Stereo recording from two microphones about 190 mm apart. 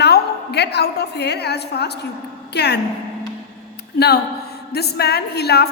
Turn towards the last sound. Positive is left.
turn(degrees=60)  # may be behind; listen again after turning